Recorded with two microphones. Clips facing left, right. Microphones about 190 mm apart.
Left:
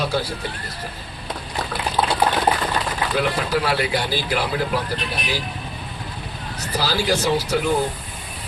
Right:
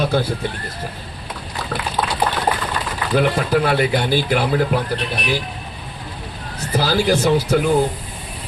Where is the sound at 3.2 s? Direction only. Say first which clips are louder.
Right 5 dB; 50° right (ahead or behind).